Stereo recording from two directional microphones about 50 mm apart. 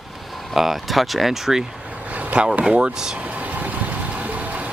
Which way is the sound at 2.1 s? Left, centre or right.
Right.